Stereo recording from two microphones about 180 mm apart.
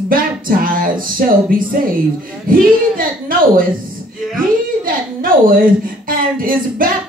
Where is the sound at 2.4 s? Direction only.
50° right (ahead or behind).